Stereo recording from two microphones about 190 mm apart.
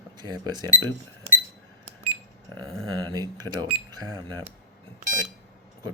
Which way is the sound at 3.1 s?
20° right (ahead or behind).